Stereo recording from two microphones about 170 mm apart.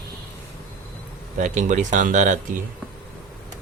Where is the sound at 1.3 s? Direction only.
45° right (ahead or behind).